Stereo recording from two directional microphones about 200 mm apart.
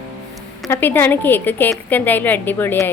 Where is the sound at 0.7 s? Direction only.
10° left (ahead or behind).